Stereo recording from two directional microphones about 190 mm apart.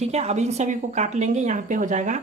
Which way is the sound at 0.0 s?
35° right (ahead or behind).